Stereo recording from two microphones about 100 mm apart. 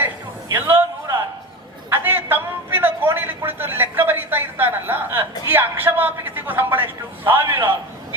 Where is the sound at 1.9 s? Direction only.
20° right (ahead or behind).